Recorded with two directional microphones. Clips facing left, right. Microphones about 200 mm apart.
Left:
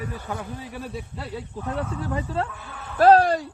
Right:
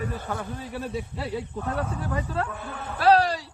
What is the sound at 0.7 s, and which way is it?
Speech, centre (ahead or behind).